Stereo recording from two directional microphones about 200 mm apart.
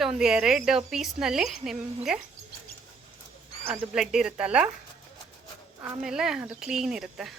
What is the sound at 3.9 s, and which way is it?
Speech, 5° right (ahead or behind).